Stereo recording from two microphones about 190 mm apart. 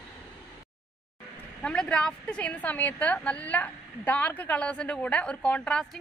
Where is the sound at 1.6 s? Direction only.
5° left (ahead or behind).